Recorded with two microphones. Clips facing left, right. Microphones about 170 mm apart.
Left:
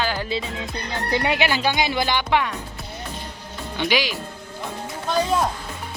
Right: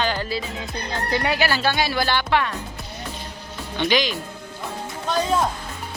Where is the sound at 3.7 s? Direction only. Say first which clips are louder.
Right 2 dB; 10° left (ahead or behind).